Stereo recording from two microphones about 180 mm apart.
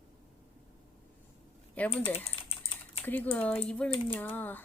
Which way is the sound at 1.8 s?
10° left (ahead or behind).